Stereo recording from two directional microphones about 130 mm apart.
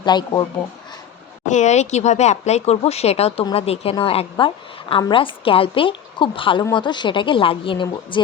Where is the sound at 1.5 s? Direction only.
65° left (ahead or behind).